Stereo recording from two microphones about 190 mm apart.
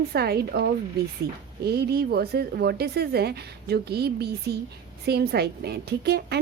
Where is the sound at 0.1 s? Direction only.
55° right (ahead or behind).